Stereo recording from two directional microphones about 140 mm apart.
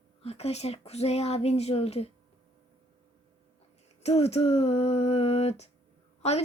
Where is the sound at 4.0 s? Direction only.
50° left (ahead or behind).